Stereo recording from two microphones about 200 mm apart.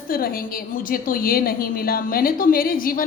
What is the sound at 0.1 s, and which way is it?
A woman's voice, 45° left (ahead or behind).